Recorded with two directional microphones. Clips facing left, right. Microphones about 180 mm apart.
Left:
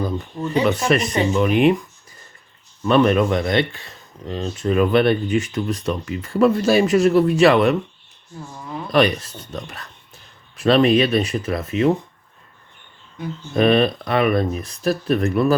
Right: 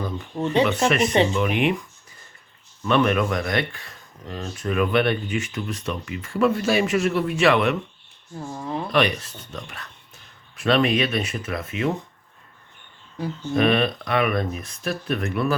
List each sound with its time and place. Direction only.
0.3 s speech: 30° right (ahead or behind)
0.6 s speech: 35° left (ahead or behind)
2.8 s speech: 35° left (ahead or behind)
8.4 s speech: 30° right (ahead or behind)
8.9 s speech: 40° left (ahead or behind)
13.6 s speech: 35° left (ahead or behind)